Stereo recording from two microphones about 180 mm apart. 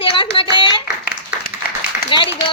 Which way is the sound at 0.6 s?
25° left (ahead or behind).